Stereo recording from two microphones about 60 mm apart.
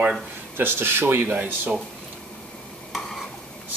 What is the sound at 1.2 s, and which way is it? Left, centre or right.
Speech, right.